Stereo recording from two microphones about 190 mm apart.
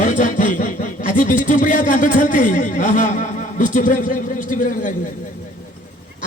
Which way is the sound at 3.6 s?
45° left (ahead or behind).